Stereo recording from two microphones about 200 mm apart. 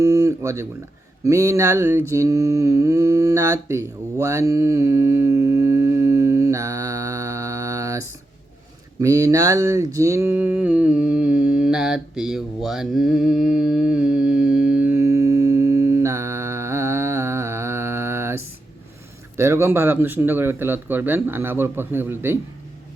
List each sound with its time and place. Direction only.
0.0 s speech: 15° right (ahead or behind)
1.2 s mantra: 15° right (ahead or behind)
9.0 s a sound: 15° right (ahead or behind)
19.4 s speech: 15° right (ahead or behind)